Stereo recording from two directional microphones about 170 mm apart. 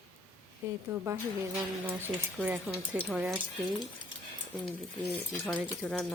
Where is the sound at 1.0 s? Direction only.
15° right (ahead or behind).